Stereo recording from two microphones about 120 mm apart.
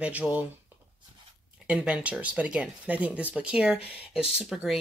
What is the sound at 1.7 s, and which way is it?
Speech, 10° right (ahead or behind).